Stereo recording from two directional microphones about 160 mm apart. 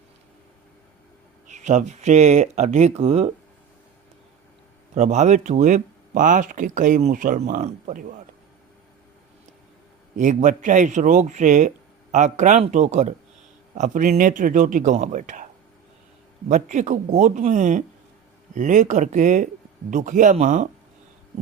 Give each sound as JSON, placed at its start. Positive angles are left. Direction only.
{"t": 1.5, "sound": "speech", "side_deg": -50}
{"t": 4.9, "sound": "speech", "side_deg": -50}
{"t": 10.2, "sound": "speech", "side_deg": -50}
{"t": 16.5, "sound": "speech", "side_deg": -50}